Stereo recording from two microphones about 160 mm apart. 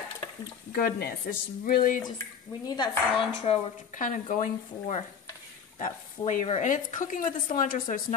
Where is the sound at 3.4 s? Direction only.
40° left (ahead or behind).